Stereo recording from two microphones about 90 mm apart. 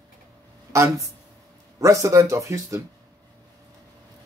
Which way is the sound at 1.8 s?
35° right (ahead or behind).